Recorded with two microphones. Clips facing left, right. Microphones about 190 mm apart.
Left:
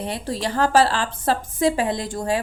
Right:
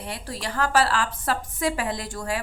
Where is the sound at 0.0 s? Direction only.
25° left (ahead or behind).